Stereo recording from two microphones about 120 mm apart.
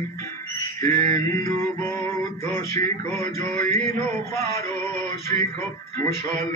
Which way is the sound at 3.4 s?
25° left (ahead or behind).